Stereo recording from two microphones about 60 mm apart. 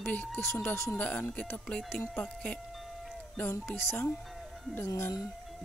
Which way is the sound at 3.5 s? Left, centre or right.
Left.